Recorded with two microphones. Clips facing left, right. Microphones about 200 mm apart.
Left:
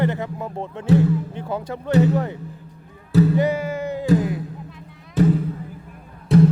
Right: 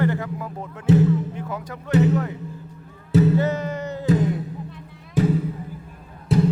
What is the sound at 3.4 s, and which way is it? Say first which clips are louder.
Music: left 2 dB; 10° left (ahead or behind).